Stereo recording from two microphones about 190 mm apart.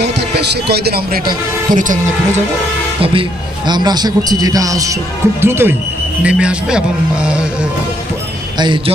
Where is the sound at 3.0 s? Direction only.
30° right (ahead or behind); by 6.8 s 5° right (ahead or behind).